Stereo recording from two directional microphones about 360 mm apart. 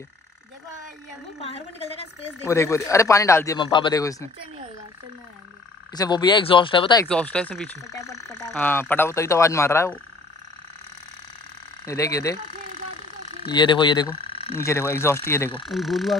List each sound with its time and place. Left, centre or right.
1.4 s speech: centre
5.9 s speech: centre
11.8 s speech: centre
13.4 s speech: centre